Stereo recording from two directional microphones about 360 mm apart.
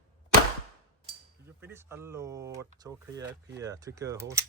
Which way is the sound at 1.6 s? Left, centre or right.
Centre.